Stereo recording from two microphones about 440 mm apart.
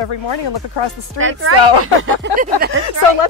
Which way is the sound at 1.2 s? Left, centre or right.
Right.